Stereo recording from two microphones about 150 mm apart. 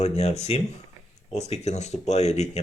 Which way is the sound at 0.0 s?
45° left (ahead or behind).